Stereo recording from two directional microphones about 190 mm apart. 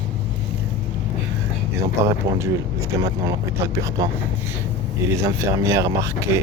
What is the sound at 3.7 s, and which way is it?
Speech, 15° right (ahead or behind).